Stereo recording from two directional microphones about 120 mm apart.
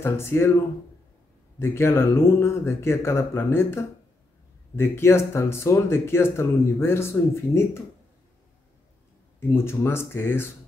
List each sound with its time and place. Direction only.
0.0 s speech: 20° left (ahead or behind)
1.6 s speech: 20° left (ahead or behind)
9.5 s speech: 20° left (ahead or behind)